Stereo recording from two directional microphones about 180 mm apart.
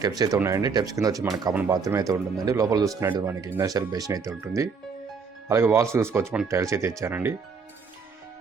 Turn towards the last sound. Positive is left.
turn(degrees=-10)  # may be behind; listen again after turning